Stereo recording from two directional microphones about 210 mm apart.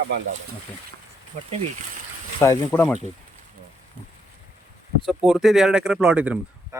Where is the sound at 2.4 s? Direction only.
15° left (ahead or behind).